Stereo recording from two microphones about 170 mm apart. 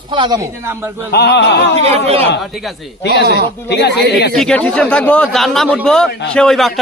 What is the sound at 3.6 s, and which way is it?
Speech, 80° left.